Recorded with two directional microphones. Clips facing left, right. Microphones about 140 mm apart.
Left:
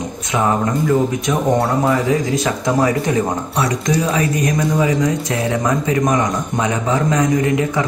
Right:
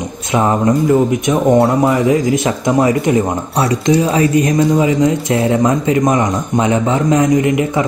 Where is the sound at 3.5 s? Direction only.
30° right (ahead or behind).